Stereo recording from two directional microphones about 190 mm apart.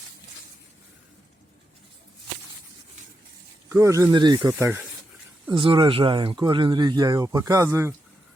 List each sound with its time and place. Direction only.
3.7 s speech: 15° right (ahead or behind)
4.5 s speech: 10° right (ahead or behind)
5.5 s speech: 25° right (ahead or behind)